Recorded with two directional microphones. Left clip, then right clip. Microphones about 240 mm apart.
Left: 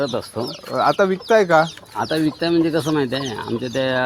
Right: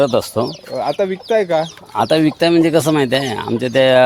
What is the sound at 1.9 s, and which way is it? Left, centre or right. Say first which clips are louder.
Speech: right 7 dB; right.